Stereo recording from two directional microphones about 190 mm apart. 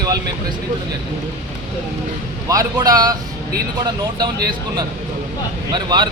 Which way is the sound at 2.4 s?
20° right (ahead or behind).